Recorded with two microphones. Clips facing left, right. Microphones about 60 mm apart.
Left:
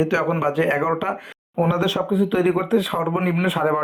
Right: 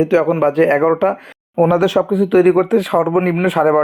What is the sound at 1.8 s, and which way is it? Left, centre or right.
Speech, right.